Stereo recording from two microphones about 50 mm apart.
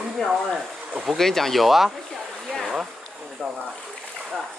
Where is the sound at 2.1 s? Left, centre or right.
Centre.